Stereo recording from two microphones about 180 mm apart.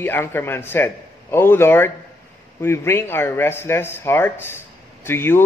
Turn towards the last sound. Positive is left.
turn(degrees=15)  # may be behind; listen again after turning